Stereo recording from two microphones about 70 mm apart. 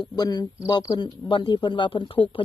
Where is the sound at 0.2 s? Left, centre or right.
Left.